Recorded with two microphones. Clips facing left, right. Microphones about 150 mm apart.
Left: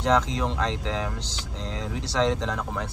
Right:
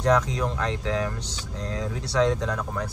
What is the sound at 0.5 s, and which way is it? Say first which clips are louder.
Speech: even; 5° right (ahead or behind).